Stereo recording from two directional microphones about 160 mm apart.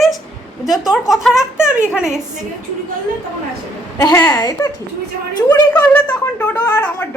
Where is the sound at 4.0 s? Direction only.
20° left (ahead or behind).